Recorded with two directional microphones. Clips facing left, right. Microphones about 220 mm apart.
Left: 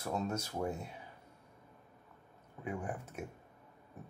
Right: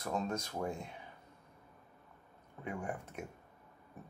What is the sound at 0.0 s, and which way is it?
Speech, 10° left (ahead or behind).